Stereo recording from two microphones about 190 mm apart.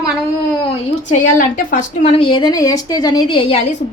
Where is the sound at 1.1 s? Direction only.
45° left (ahead or behind).